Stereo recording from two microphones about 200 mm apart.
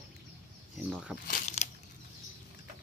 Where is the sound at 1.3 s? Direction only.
40° left (ahead or behind).